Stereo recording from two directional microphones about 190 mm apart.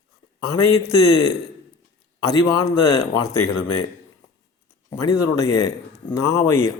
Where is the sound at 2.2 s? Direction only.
20° left (ahead or behind).